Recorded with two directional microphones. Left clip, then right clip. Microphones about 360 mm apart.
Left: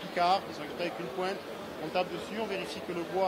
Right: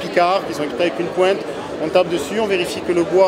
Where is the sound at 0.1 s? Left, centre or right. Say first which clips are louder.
Right 11 dB; left.